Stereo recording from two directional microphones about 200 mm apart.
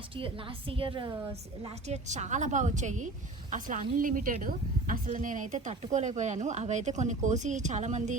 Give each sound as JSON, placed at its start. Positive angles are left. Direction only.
{"t": 0.7, "sound": "a woman's voice", "side_deg": -25}